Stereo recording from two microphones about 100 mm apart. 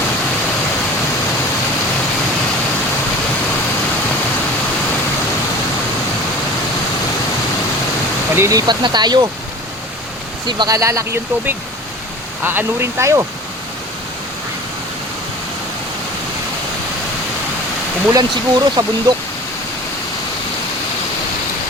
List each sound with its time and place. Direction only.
8.4 s speech: 35° right (ahead or behind)
8.6 s speech: 45° right (ahead or behind)
10.6 s speech: 35° right (ahead or behind)
18.1 s speech: 45° right (ahead or behind)